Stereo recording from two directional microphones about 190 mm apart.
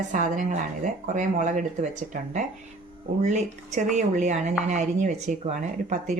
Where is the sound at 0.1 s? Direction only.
40° right (ahead or behind).